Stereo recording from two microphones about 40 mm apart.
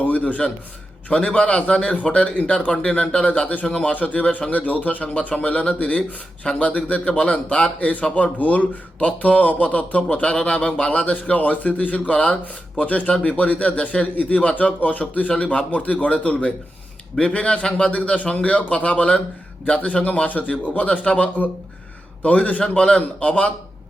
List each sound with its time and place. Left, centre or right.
0.0 s a man's voice: left
14.5 s a man's voice: left